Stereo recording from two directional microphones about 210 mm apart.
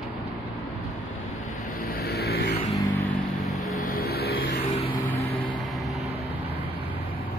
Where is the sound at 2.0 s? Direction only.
50° left (ahead or behind).